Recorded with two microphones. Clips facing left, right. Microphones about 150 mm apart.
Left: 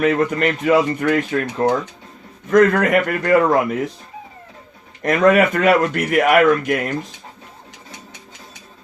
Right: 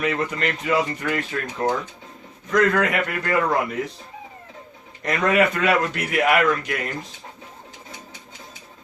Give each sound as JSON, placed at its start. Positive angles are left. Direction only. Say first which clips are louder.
{"t": 0.0, "sound": "speech", "louder": "left 7 dB", "side_deg": 55}
{"t": 2.5, "sound": "speech", "louder": "left 6 dB", "side_deg": 50}
{"t": 5.0, "sound": "speech", "louder": "left 6 dB", "side_deg": 50}